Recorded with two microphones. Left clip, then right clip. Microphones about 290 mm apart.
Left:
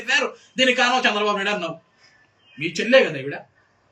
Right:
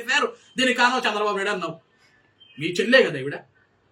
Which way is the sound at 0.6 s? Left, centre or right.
Centre.